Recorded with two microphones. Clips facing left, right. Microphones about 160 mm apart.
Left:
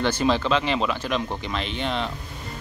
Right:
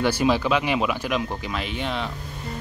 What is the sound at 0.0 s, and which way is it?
Speech, 10° right (ahead or behind).